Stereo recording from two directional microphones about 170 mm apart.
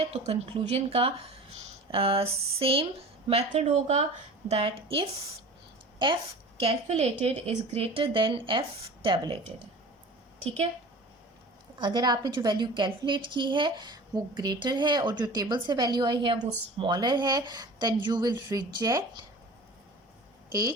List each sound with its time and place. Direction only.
0.3 s a woman's voice: 40° right (ahead or behind)
11.8 s a woman's voice: 25° right (ahead or behind)
20.5 s a woman's voice: 20° right (ahead or behind)